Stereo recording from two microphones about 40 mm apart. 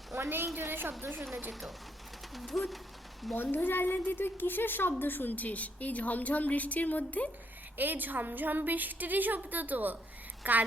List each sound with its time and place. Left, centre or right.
0.6 s a woman's voice: right
2.3 s speech: centre
3.3 s a woman's voice: left
7.8 s a woman's voice: right